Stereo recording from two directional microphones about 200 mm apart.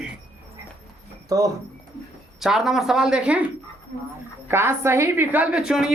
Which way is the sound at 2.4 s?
Centre (ahead or behind).